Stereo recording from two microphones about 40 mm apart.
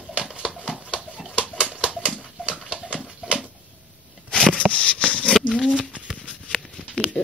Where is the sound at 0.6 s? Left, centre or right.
Right.